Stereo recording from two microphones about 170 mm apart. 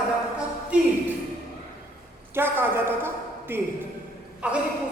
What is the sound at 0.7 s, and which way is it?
Speech, 5° right (ahead or behind).